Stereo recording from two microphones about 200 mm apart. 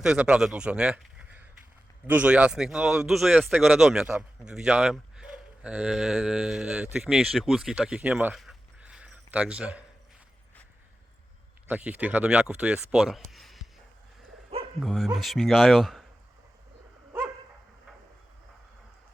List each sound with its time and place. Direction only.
0.0 s a man's voice: 5° right (ahead or behind)
11.7 s speech: 5° right (ahead or behind)
13.3 s a sound: centre (ahead or behind)
14.8 s speech: centre (ahead or behind)